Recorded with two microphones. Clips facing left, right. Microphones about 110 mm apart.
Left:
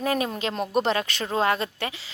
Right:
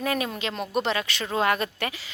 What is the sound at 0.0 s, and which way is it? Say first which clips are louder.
A woman's voice: left 2 dB; 35° left (ahead or behind).